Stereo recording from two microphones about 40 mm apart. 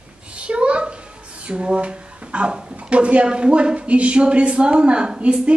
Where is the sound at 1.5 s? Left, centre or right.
Right.